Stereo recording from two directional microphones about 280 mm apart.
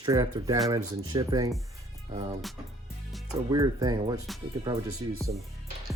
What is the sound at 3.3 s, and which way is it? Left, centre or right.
Speech, centre.